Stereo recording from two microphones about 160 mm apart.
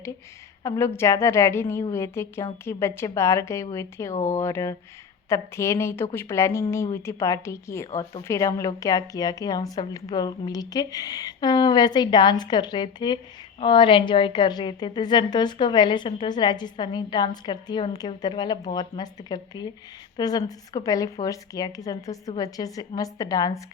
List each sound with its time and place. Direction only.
0.6 s a woman's voice: 15° left (ahead or behind)